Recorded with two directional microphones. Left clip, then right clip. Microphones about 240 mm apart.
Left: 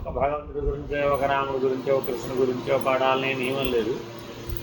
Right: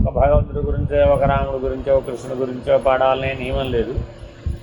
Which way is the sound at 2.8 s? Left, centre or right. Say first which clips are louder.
Right 5 dB; right.